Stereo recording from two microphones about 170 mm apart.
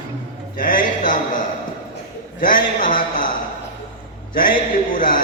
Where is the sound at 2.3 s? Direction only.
50° left (ahead or behind).